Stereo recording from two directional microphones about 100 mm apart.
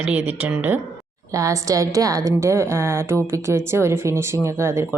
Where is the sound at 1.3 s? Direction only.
30° right (ahead or behind).